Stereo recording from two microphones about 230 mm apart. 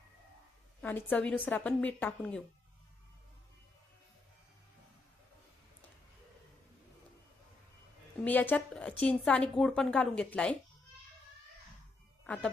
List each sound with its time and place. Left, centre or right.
0.8 s a woman's voice: centre
8.2 s a woman's voice: centre
12.2 s speech: centre